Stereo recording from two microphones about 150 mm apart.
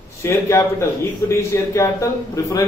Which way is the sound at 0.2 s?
20° left (ahead or behind).